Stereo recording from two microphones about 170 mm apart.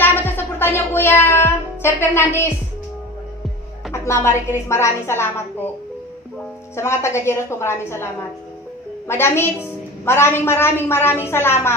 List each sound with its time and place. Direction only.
0.0 s child singing: 10° left (ahead or behind)
3.9 s a woman's voice: 15° left (ahead or behind)
6.7 s a woman's voice: 15° left (ahead or behind)